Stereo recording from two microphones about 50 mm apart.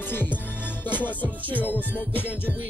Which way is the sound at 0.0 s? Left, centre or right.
Left.